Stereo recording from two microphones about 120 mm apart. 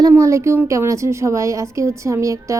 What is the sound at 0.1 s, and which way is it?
A woman's voice, 25° right (ahead or behind).